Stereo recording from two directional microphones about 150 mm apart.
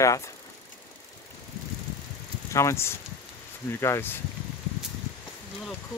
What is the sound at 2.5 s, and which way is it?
Speech, 20° left (ahead or behind).